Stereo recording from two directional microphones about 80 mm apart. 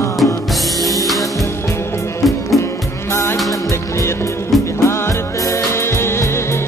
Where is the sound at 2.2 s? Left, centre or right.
Centre.